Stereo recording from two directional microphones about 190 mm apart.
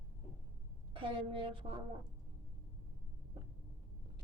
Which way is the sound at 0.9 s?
25° right (ahead or behind).